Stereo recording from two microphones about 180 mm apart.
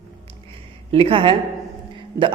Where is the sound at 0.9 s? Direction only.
30° right (ahead or behind).